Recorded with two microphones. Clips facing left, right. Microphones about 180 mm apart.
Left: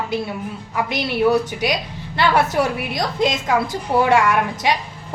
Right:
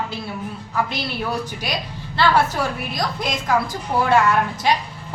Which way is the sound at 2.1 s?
15° left (ahead or behind).